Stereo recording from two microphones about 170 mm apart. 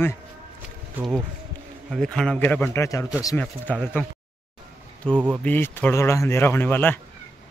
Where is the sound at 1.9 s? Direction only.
5° left (ahead or behind).